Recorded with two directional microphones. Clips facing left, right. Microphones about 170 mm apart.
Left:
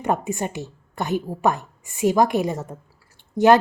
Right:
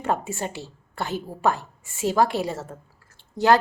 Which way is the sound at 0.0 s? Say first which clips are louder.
Left 3 dB; 15° left (ahead or behind).